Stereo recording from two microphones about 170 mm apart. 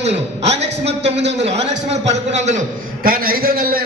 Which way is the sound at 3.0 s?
60° right (ahead or behind).